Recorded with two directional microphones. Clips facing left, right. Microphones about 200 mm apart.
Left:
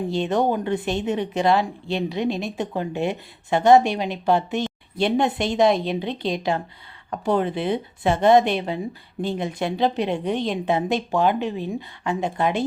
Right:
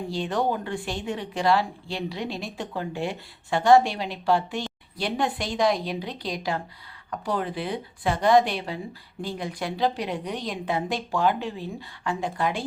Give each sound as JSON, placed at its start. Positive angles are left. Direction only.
{"t": 0.1, "sound": "speech", "side_deg": 20}